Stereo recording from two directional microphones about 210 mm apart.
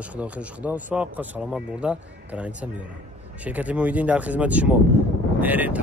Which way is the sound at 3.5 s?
5° right (ahead or behind).